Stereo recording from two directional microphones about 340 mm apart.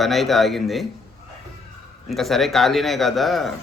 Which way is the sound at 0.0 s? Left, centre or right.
Centre.